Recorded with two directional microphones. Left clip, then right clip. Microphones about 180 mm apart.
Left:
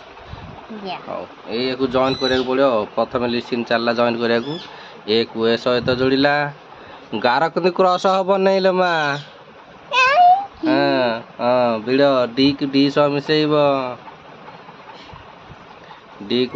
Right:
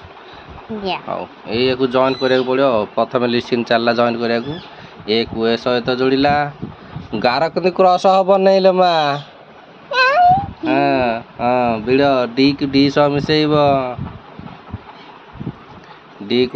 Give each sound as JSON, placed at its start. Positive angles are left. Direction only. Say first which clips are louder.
{"t": 1.1, "sound": "speech", "louder": "right 4 dB", "side_deg": -30}
{"t": 1.9, "sound": "speech", "louder": "even", "side_deg": -10}
{"t": 4.1, "sound": "a man's voice", "louder": "even", "side_deg": 0}
{"t": 9.9, "sound": "speech", "louder": "right 1 dB", "side_deg": -20}
{"t": 16.3, "sound": "speech", "louder": "right 4 dB", "side_deg": -5}